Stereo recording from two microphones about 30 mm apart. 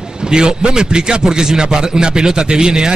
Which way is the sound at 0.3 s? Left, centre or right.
Right.